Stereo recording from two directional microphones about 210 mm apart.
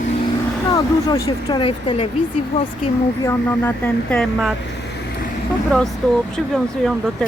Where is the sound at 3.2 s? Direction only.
10° left (ahead or behind).